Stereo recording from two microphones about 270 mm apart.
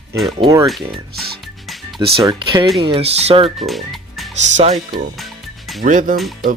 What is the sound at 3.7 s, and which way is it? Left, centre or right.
Music, centre.